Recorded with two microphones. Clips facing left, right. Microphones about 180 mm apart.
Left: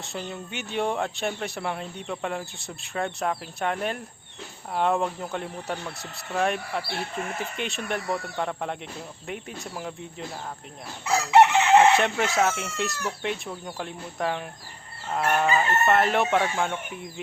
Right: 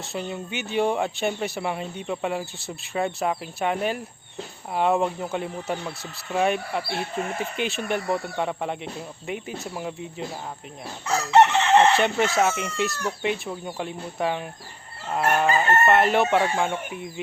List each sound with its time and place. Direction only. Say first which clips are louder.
0.0 s speech: right 4 dB; centre (ahead or behind)
11.0 s chicken: even; 10° left (ahead or behind)
11.9 s speech: right 2 dB; centre (ahead or behind)
15.1 s fowl: right 2 dB; 5° right (ahead or behind)
15.5 s speech: right 2 dB; centre (ahead or behind)